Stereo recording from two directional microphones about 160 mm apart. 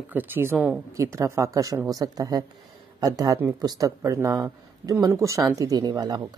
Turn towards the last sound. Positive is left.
turn(degrees=-25)  # may be behind; listen again after turning